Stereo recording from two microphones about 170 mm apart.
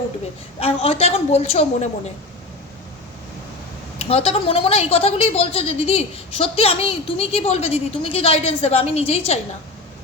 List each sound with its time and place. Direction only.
0.6 s a woman's voice: 35° left (ahead or behind)
3.9 s a woman's voice: 35° left (ahead or behind)